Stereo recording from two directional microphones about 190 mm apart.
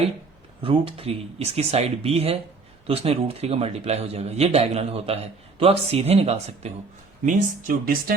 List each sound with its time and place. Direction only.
0.6 s a man's voice: 30° right (ahead or behind)
7.3 s speech: 50° right (ahead or behind)